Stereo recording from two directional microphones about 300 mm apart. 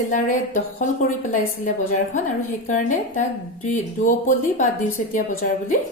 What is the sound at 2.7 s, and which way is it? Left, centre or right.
A woman's voice, left.